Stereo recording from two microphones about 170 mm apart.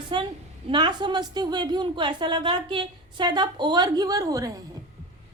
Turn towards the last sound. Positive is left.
turn(degrees=-20)  # may be behind; listen again after turning